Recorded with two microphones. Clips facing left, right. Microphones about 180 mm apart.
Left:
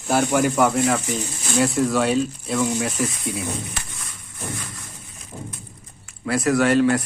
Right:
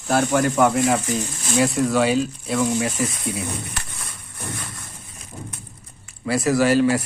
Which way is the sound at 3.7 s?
65° right (ahead or behind).